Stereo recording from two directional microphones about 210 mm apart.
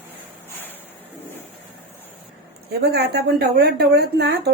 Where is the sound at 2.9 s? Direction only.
50° right (ahead or behind).